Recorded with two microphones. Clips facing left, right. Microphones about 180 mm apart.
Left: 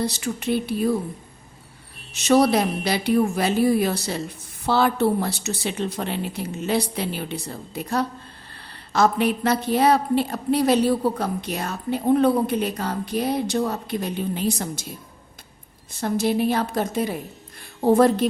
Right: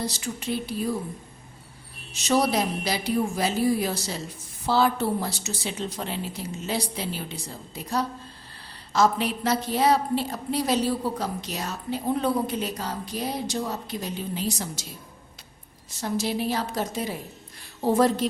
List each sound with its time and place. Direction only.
0.0 s a woman's voice: 60° left (ahead or behind)
2.1 s a woman's voice: 60° left (ahead or behind)
15.9 s a woman's voice: 55° left (ahead or behind)